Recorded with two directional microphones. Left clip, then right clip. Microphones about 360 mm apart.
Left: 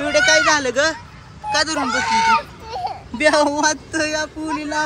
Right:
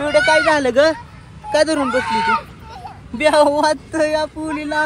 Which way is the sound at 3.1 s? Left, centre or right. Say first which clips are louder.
Right 3 dB; centre.